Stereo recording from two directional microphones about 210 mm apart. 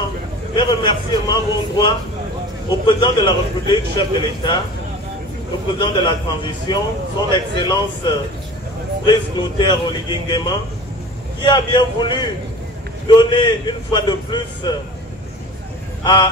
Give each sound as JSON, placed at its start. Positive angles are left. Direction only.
{"t": 0.6, "sound": "a man's voice", "side_deg": 20}
{"t": 5.8, "sound": "a man's voice", "side_deg": 20}
{"t": 16.0, "sound": "speech", "side_deg": 20}